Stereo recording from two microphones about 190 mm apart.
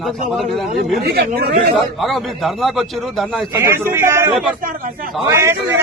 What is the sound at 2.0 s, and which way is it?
A man's voice, centre (ahead or behind).